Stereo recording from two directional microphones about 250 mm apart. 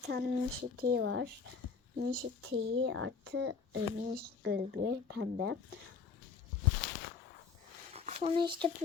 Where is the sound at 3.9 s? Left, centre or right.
Right.